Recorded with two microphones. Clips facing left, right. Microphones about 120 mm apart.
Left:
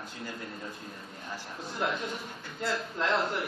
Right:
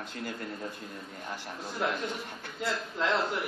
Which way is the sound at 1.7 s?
Centre (ahead or behind).